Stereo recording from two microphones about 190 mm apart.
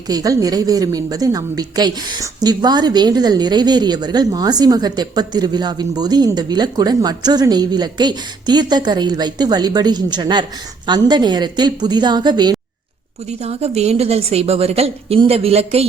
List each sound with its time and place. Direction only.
0.1 s a woman's voice: 20° right (ahead or behind)
13.4 s a woman's voice: 35° right (ahead or behind)